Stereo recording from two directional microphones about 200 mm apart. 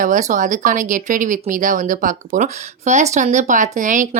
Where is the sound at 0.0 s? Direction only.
40° right (ahead or behind).